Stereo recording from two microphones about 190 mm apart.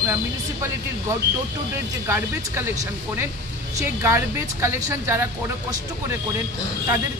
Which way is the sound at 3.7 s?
15° right (ahead or behind).